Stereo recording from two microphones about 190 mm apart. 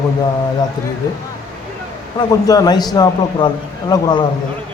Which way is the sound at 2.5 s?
20° left (ahead or behind).